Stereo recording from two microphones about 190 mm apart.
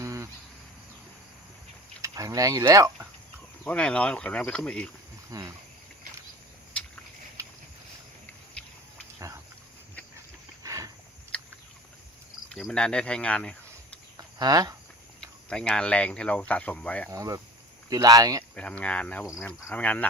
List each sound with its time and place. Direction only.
0.0 s cricket: 15° right (ahead or behind)
2.0 s speech: 15° right (ahead or behind)
3.6 s speech: 5° left (ahead or behind)
5.3 s speech: 20° right (ahead or behind)
9.1 s a sound: 15° right (ahead or behind)
10.6 s a sound: 15° right (ahead or behind)
12.5 s speech: centre (ahead or behind)
14.2 s a sound: 20° right (ahead or behind)
15.4 s speech: 5° left (ahead or behind)
17.1 s speech: 20° right (ahead or behind)
18.5 s speech: 5° left (ahead or behind)